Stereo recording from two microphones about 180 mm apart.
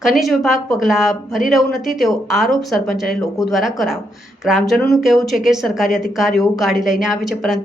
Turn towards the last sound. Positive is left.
turn(degrees=0)  # may be behind; listen again after turning